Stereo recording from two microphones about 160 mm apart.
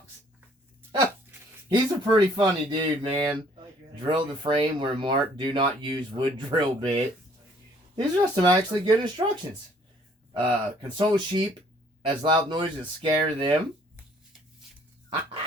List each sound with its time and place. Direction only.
1.7 s speech: 25° right (ahead or behind)
7.9 s speech: 25° right (ahead or behind)